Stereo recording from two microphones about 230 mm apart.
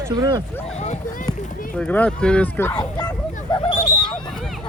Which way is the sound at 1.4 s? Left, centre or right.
Left.